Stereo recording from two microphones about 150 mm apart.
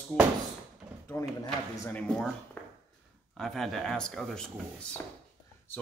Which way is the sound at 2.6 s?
10° left (ahead or behind).